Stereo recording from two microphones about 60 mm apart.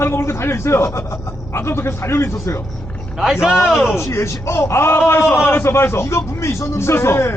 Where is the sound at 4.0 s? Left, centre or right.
Left.